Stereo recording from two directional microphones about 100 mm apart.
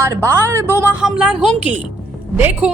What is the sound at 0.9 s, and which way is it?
A woman's voice, 10° right (ahead or behind).